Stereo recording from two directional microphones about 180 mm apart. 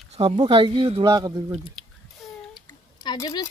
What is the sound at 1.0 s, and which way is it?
Speech, 20° right (ahead or behind).